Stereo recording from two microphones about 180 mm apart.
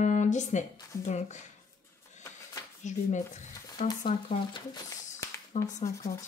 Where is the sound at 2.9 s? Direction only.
40° left (ahead or behind).